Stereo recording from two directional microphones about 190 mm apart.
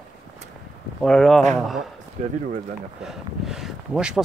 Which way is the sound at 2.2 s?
40° right (ahead or behind).